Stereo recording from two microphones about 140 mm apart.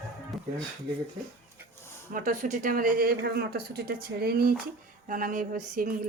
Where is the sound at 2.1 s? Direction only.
75° right (ahead or behind).